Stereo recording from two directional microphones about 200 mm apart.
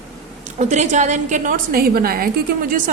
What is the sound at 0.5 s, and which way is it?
A woman's voice, 35° right (ahead or behind).